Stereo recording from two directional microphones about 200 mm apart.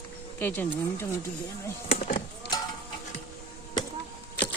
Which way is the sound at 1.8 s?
30° left (ahead or behind).